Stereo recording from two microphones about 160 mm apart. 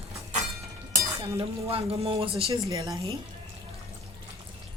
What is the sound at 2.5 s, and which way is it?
Speech, 20° right (ahead or behind).